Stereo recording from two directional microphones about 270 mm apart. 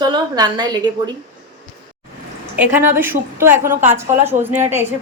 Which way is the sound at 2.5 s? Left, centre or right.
Centre.